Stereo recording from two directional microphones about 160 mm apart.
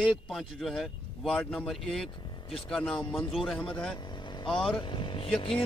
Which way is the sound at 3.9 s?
30° left (ahead or behind).